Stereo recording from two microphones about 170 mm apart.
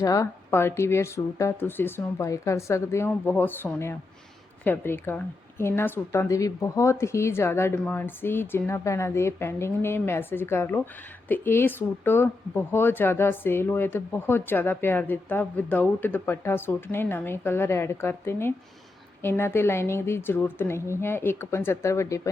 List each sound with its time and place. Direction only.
0.0 s speech: 20° left (ahead or behind)